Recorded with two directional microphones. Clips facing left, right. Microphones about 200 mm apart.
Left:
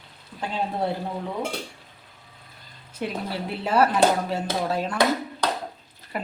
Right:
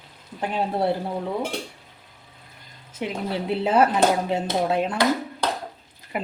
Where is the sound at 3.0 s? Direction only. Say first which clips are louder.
Right 2 dB; 15° right (ahead or behind).